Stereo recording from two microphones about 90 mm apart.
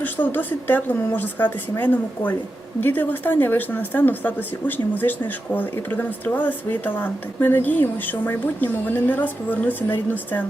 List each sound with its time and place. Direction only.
0.0 s speech: 20° left (ahead or behind)